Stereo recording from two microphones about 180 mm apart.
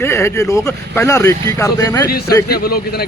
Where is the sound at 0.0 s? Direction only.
15° left (ahead or behind).